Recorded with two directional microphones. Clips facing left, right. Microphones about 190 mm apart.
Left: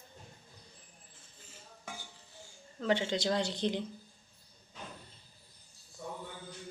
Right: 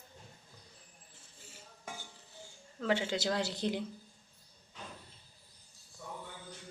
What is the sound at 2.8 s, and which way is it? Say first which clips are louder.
A woman's voice: left 1 dB; 5° right (ahead or behind).